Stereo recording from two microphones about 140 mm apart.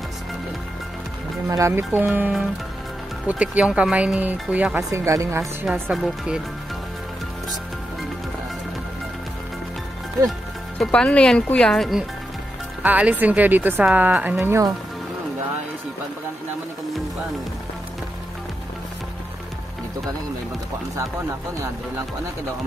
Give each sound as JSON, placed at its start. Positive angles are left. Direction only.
{"t": 1.5, "sound": "speech", "side_deg": -20}
{"t": 4.9, "sound": "a woman's voice", "side_deg": -20}
{"t": 5.7, "sound": "speech", "side_deg": 0}
{"t": 10.8, "sound": "speech", "side_deg": 5}
{"t": 12.8, "sound": "a woman's voice", "side_deg": -10}